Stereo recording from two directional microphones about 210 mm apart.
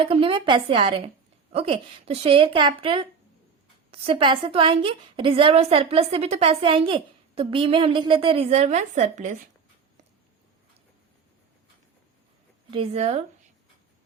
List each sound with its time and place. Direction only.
0.0 s a woman's voice: 25° right (ahead or behind)
12.7 s a woman's voice: 25° right (ahead or behind)